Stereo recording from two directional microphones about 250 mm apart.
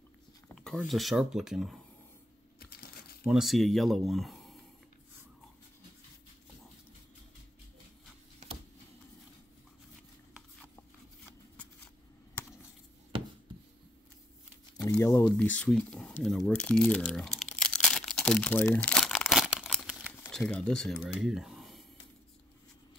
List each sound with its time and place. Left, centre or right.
0.6 s speech: centre
2.6 s crumpling: left
3.3 s speech: centre
10.3 s a sound: centre
14.9 s speech: centre
17.4 s crumpling: centre